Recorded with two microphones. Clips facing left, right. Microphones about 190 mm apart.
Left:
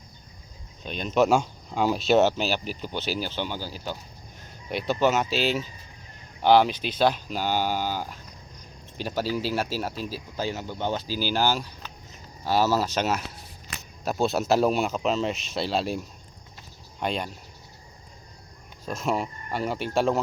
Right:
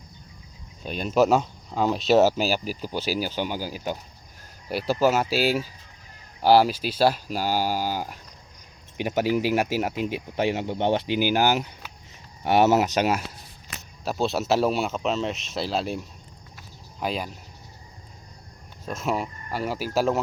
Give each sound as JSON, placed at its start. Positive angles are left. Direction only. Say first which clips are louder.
{"t": 0.9, "sound": "speech", "louder": "right 1 dB", "side_deg": -5}
{"t": 11.1, "sound": "speech", "louder": "right 4 dB", "side_deg": -15}
{"t": 14.0, "sound": "speech", "louder": "left 1 dB", "side_deg": 0}
{"t": 18.9, "sound": "speech", "louder": "even", "side_deg": 0}